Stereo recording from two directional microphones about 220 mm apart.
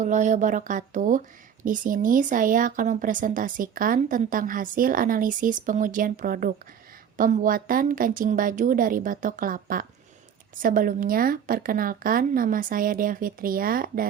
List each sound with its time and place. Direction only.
0.0 s speech: 35° right (ahead or behind)